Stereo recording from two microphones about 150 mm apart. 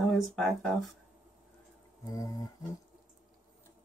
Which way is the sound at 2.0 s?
25° left (ahead or behind).